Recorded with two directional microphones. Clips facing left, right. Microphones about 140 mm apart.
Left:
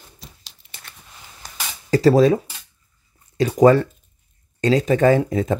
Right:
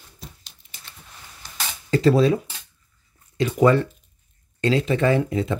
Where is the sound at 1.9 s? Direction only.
40° left (ahead or behind).